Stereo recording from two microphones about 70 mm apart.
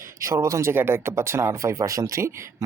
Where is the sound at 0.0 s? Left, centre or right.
Right.